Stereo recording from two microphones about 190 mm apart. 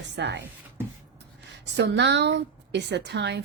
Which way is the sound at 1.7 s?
65° right (ahead or behind).